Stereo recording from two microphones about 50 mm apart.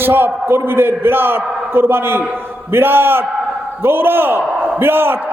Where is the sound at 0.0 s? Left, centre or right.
Right.